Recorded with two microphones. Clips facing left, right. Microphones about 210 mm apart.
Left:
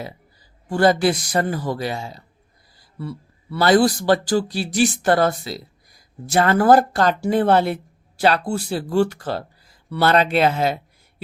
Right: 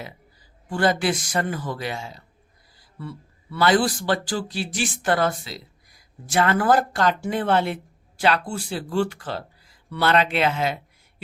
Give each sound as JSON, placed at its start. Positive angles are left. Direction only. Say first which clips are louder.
{"t": 0.7, "sound": "speech", "louder": "left 5 dB", "side_deg": 40}